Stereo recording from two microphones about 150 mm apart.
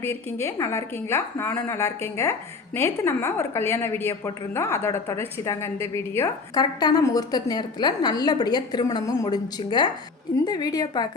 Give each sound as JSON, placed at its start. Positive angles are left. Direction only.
{"t": 0.0, "sound": "a woman's voice", "side_deg": 15}